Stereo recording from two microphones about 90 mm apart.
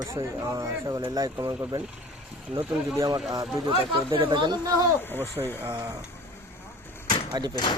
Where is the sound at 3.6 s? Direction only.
60° right (ahead or behind).